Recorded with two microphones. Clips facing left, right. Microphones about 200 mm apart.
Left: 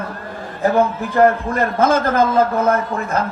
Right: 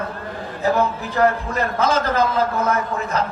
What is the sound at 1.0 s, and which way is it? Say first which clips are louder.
A man's voice: left 4 dB; 50° left (ahead or behind).